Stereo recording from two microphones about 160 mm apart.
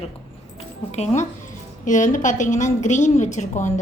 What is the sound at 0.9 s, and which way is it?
A woman's voice, 45° left (ahead or behind).